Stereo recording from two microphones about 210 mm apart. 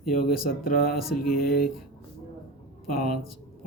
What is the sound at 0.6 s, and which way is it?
Speech, 45° left (ahead or behind).